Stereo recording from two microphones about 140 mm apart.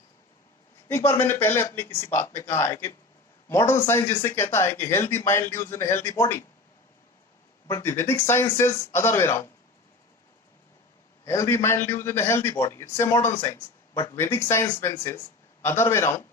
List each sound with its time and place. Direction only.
0.9 s speech: 15° left (ahead or behind)
7.7 s speech: 20° left (ahead or behind)
11.3 s speech: 20° left (ahead or behind)
13.9 s speech: 30° left (ahead or behind)
14.2 s speech: 20° left (ahead or behind)